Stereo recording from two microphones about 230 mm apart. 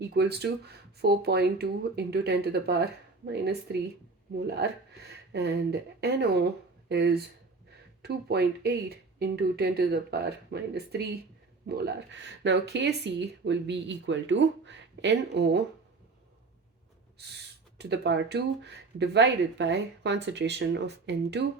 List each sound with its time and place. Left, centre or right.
0.0 s speech: right
17.7 s speech: right